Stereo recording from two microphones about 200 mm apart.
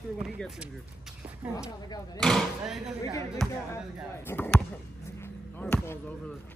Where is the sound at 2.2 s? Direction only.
Centre (ahead or behind).